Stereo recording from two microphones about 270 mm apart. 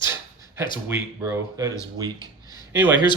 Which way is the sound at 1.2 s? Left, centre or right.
Centre.